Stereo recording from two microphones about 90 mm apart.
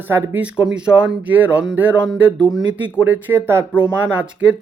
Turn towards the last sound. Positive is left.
turn(degrees=-15)  # may be behind; listen again after turning